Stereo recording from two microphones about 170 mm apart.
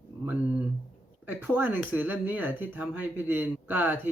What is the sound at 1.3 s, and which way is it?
Speech, 10° right (ahead or behind).